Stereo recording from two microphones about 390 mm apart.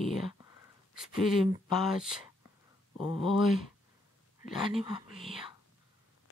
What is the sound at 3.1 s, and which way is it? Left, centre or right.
Speech, centre.